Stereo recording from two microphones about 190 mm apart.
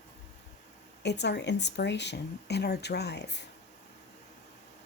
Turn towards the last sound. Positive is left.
turn(degrees=65)  # may be behind; listen again after turning